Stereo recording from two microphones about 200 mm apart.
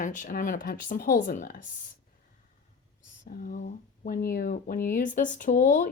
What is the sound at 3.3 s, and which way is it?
Speech, 45° left (ahead or behind).